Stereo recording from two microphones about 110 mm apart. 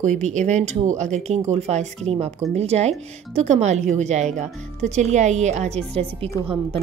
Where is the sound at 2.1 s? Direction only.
75° right (ahead or behind).